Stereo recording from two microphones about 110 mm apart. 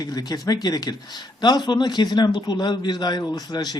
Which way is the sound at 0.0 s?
35° left (ahead or behind).